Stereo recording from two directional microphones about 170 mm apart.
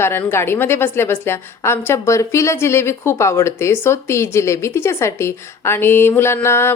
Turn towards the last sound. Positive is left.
turn(degrees=15)  # may be behind; listen again after turning